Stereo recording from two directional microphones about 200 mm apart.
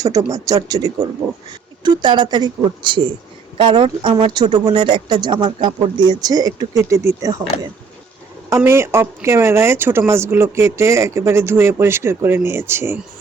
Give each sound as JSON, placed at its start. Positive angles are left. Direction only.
{"t": 0.3, "sound": "speech", "side_deg": -15}
{"t": 8.4, "sound": "speech", "side_deg": -15}